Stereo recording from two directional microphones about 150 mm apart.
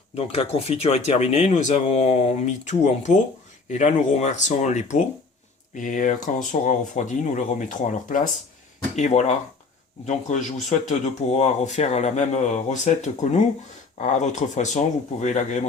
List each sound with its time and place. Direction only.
0.1 s speech: 45° left (ahead or behind)